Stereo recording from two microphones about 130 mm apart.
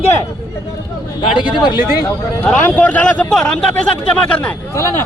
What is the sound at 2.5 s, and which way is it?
A man's voice, 10° left (ahead or behind).